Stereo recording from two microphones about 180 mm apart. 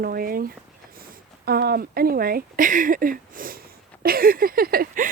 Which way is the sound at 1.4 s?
60° right (ahead or behind).